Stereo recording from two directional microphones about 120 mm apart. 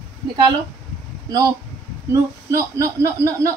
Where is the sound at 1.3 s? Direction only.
30° right (ahead or behind).